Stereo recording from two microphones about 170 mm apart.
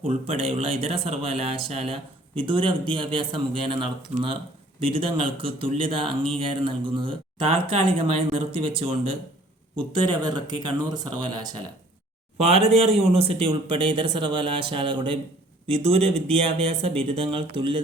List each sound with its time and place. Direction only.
0.1 s speech: 35° right (ahead or behind)
4.1 s speech: 40° right (ahead or behind); by 11.5 s 25° right (ahead or behind)
12.4 s speech: 35° right (ahead or behind)